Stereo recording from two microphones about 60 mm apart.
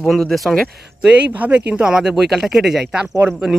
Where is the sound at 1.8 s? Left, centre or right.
Centre.